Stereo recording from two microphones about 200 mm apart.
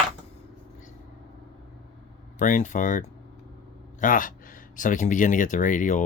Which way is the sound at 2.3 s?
40° left (ahead or behind).